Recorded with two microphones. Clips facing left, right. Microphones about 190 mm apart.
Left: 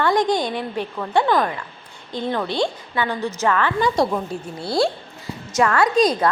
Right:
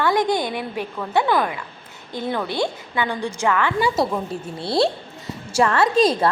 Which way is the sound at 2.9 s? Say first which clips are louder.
Even; 15° right (ahead or behind).